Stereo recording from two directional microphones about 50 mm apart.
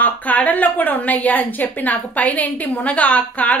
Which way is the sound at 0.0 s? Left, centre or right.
Left.